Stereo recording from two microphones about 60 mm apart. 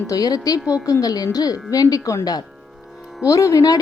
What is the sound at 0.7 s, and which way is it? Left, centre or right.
Speech, left.